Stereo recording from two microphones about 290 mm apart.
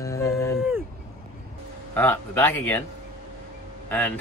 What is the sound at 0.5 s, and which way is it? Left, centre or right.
Speech, centre.